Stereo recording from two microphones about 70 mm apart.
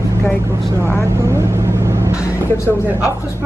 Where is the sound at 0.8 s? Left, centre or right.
Right.